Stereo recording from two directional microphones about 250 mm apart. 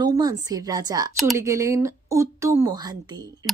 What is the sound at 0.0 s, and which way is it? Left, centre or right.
A woman's voice, centre.